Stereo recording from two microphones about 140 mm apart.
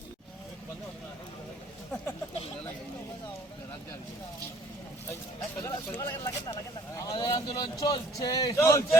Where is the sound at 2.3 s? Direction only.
45° left (ahead or behind).